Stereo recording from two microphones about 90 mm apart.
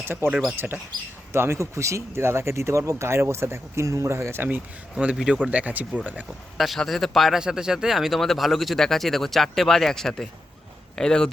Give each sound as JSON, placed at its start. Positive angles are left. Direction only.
{"t": 0.0, "sound": "speech", "side_deg": -30}
{"t": 4.4, "sound": "speech", "side_deg": -15}
{"t": 6.6, "sound": "speech", "side_deg": 0}